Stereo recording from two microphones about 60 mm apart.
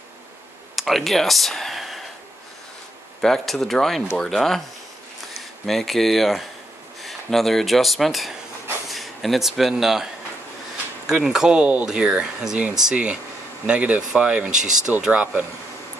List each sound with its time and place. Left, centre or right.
0.7 s speech: centre
3.2 s speech: centre
5.7 s speech: centre
11.1 s speech: centre